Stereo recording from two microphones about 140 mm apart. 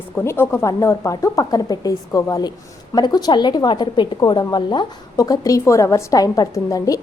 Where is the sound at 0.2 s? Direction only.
15° left (ahead or behind).